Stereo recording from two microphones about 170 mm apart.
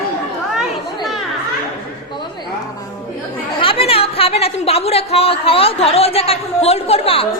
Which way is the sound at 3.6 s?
30° left (ahead or behind).